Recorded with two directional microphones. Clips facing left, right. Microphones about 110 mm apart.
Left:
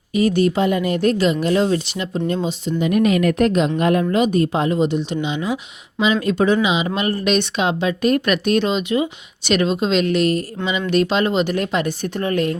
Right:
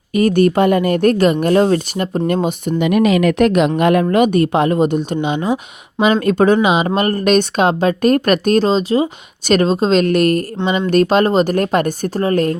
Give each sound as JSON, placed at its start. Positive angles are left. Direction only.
{"t": 0.1, "sound": "speech", "side_deg": -50}
{"t": 2.2, "sound": "speech", "side_deg": -65}
{"t": 4.0, "sound": "speech", "side_deg": -60}